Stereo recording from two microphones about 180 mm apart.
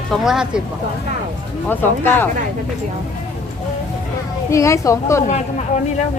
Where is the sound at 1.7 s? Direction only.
10° left (ahead or behind).